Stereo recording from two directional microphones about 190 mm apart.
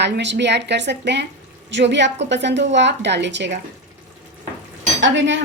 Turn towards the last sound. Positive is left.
turn(degrees=-75)  # may be behind; listen again after turning